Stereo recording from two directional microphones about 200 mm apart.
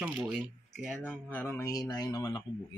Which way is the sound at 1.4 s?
10° left (ahead or behind).